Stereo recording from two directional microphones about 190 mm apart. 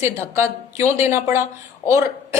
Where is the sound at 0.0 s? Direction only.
15° right (ahead or behind).